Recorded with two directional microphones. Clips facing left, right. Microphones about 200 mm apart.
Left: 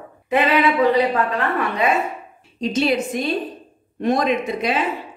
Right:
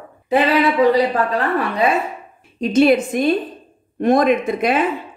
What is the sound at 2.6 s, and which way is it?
Speech, 55° right (ahead or behind).